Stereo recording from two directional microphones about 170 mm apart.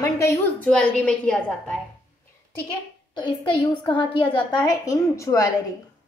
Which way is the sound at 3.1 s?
25° left (ahead or behind).